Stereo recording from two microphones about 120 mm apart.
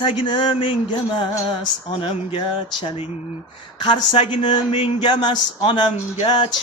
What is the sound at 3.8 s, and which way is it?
Speech, 40° left (ahead or behind).